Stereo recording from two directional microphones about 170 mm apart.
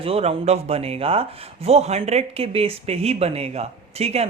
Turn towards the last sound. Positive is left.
turn(degrees=-40)  # may be behind; listen again after turning